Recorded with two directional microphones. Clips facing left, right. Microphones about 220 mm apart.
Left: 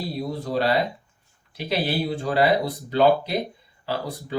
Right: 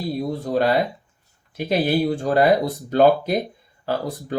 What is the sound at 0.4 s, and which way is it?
Speech, 50° right (ahead or behind).